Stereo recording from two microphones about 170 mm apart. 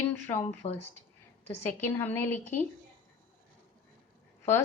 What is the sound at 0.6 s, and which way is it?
Speech, 40° left (ahead or behind).